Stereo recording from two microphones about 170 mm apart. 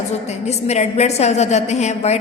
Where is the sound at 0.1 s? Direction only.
40° left (ahead or behind).